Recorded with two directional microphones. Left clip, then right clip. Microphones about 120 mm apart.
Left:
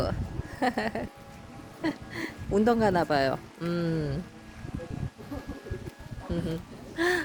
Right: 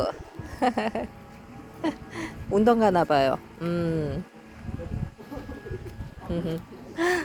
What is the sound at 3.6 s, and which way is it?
Speech, 15° left (ahead or behind).